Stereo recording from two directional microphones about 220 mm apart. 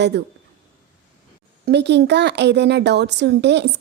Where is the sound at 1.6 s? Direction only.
50° right (ahead or behind).